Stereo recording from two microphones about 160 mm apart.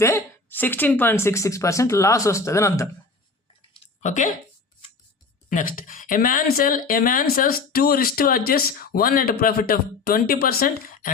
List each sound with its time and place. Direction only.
0.0 s speech: 15° left (ahead or behind)
4.0 s speech: 50° left (ahead or behind)
5.5 s speech: 60° left (ahead or behind)